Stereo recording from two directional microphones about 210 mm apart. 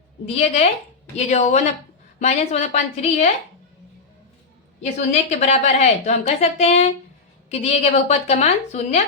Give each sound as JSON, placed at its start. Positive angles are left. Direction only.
{"t": 0.3, "sound": "a woman's voice", "side_deg": 30}
{"t": 4.8, "sound": "a woman's voice", "side_deg": 35}